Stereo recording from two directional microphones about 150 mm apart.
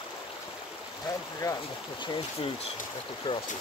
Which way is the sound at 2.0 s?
35° left (ahead or behind).